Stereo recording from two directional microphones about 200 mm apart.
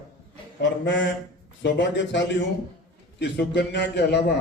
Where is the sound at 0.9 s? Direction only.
65° left (ahead or behind).